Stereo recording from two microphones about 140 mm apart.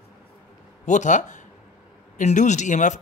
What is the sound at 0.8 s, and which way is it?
Speech, 60° left (ahead or behind).